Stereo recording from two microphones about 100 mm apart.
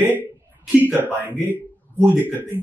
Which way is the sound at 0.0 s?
15° right (ahead or behind).